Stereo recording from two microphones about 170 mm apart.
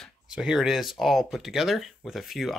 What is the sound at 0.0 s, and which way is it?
Speech, 5° right (ahead or behind).